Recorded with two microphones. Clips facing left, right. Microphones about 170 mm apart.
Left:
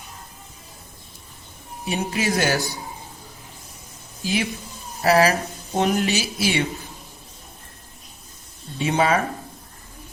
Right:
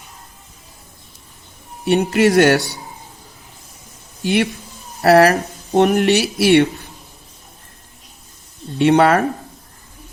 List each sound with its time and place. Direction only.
1.8 s a man's voice: 70° right (ahead or behind)
4.2 s a man's voice: 70° right (ahead or behind)
8.8 s a man's voice: 70° right (ahead or behind)